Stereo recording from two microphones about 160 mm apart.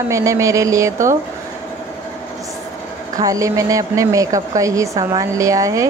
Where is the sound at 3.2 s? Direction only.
20° right (ahead or behind).